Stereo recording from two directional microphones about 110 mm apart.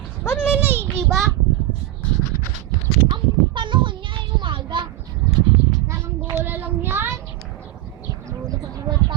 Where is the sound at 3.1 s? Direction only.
45° right (ahead or behind).